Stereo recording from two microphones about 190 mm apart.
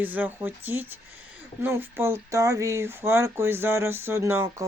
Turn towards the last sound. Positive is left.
turn(degrees=-15)  # may be behind; listen again after turning